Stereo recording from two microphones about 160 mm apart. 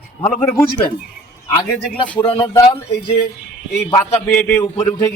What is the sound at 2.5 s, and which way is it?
Speech, 25° left (ahead or behind).